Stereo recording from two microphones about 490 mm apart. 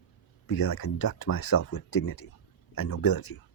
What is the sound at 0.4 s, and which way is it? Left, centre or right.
Speech, left.